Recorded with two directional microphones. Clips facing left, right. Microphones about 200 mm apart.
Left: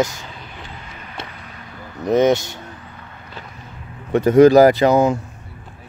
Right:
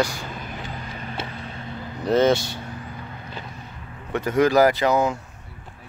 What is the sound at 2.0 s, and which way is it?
Speech, 20° left (ahead or behind).